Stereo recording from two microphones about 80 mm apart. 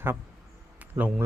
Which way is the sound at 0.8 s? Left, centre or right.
Centre.